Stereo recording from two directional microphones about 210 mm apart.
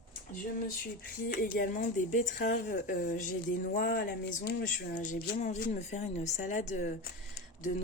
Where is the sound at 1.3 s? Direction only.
45° left (ahead or behind).